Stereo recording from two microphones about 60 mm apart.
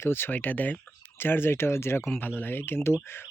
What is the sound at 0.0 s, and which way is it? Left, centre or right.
Speech, left.